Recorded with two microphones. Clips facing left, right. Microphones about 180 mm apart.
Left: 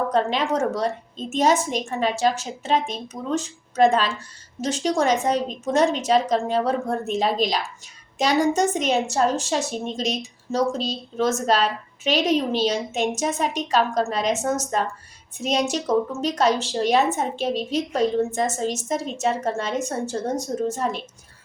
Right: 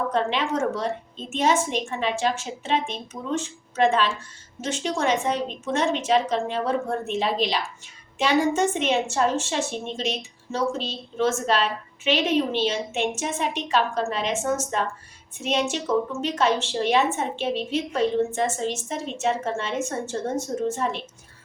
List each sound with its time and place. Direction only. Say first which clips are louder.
0.1 s a woman's voice: left 3 dB; 40° left (ahead or behind)